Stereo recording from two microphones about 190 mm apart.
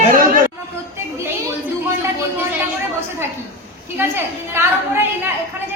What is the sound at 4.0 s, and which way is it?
A woman's voice, 10° right (ahead or behind).